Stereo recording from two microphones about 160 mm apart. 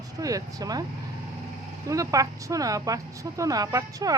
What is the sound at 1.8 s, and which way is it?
Speech, 20° right (ahead or behind).